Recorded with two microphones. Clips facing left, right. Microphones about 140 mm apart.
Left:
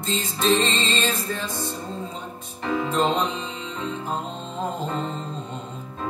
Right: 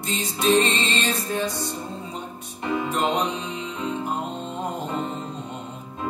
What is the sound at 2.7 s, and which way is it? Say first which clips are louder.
Music: left 1 dB; 15° right (ahead or behind).